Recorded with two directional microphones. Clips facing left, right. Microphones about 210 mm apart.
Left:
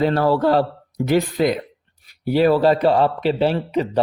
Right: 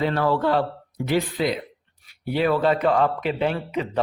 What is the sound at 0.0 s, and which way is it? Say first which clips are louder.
Speech: left 4 dB; 40° left (ahead or behind).